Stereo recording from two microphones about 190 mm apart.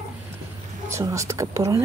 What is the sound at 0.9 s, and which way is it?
Speech, 15° right (ahead or behind).